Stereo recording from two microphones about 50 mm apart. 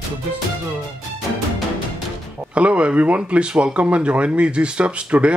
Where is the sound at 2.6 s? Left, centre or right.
Right.